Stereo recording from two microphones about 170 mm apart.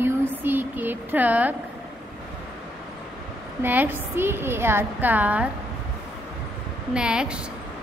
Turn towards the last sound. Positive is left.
turn(degrees=-5)  # may be behind; listen again after turning